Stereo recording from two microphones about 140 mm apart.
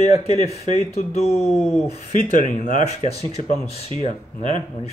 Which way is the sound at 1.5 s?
Centre (ahead or behind).